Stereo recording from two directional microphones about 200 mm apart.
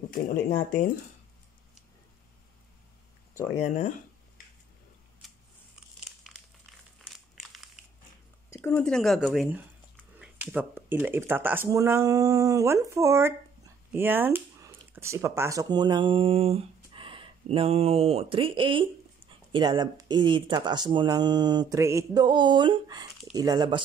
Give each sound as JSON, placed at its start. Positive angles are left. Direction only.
{"t": 0.1, "sound": "speech", "side_deg": 45}
{"t": 3.5, "sound": "speech", "side_deg": 35}
{"t": 7.0, "sound": "crumpling", "side_deg": 0}
{"t": 8.5, "sound": "speech", "side_deg": 10}